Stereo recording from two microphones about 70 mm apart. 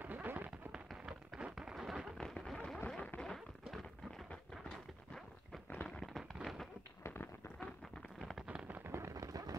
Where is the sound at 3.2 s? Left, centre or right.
Centre.